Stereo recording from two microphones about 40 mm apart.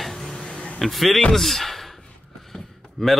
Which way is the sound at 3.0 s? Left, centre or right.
Centre.